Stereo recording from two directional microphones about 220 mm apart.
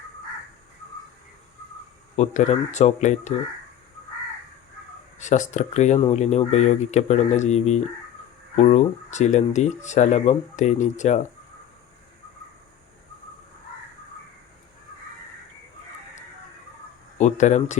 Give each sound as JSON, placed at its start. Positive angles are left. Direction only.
{"t": 2.1, "sound": "speech", "side_deg": 30}
{"t": 5.2, "sound": "speech", "side_deg": 35}
{"t": 17.2, "sound": "speech", "side_deg": 30}